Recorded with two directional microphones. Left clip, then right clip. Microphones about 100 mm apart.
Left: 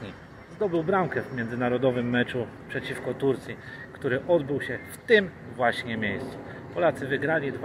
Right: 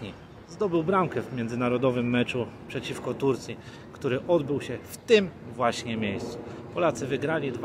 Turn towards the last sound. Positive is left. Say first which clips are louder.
# left 2 dB
turn(degrees=-45)  # may be behind; listen again after turning